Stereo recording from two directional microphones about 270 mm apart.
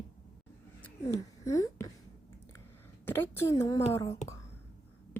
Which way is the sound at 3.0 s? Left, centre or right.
Centre.